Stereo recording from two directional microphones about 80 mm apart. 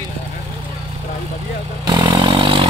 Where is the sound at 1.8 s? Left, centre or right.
Right.